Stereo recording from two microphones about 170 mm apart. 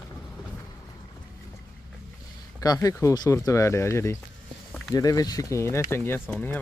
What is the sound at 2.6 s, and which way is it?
Speech, 20° left (ahead or behind).